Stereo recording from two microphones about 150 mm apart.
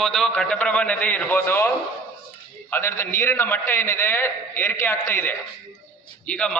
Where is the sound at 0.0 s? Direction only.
5° left (ahead or behind).